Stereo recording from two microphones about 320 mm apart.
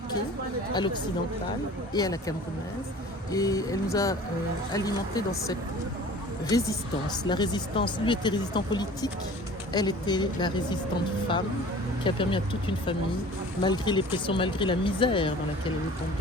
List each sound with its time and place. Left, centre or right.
1.9 s speech: centre
3.3 s speech: centre
7.3 s speech: centre
12.0 s speech: centre